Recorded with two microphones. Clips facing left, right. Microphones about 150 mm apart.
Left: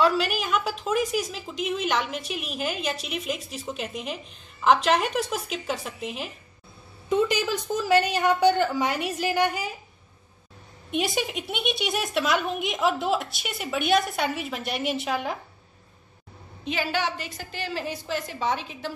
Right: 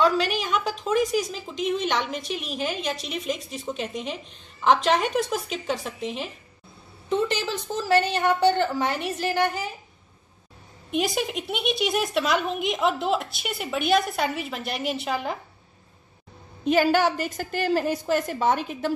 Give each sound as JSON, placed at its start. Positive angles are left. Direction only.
{"t": 0.0, "sound": "a woman's voice", "side_deg": 5}
{"t": 10.9, "sound": "a woman's voice", "side_deg": 0}
{"t": 16.6, "sound": "a woman's voice", "side_deg": -45}